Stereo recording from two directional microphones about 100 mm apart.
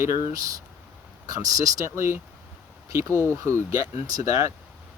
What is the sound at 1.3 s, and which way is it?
Speech, 35° right (ahead or behind).